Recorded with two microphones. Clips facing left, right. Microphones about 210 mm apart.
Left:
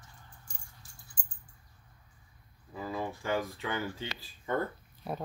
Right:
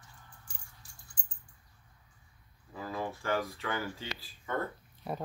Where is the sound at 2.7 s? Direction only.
15° left (ahead or behind).